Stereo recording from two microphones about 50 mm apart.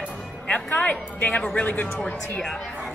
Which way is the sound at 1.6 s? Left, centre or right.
Left.